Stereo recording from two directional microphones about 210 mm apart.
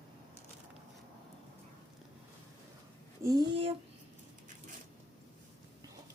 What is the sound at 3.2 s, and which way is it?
Speech, 20° right (ahead or behind).